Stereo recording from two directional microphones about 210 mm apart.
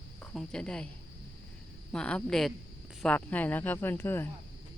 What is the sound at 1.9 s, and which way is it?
Speech, 5° left (ahead or behind).